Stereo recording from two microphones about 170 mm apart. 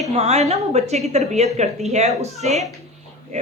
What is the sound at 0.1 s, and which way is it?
A woman's voice, 40° right (ahead or behind).